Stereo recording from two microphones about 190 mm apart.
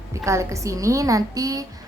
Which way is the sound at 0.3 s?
15° right (ahead or behind).